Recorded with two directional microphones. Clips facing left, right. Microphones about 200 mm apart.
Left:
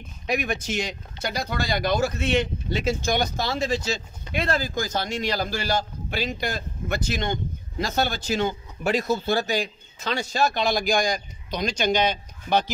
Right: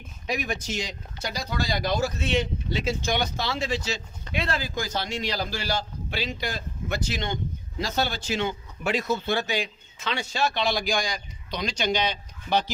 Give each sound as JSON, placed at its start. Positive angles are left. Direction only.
{"t": 0.3, "sound": "speech", "side_deg": 60}